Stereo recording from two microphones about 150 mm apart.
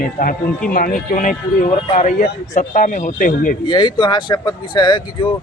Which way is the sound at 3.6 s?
30° left (ahead or behind).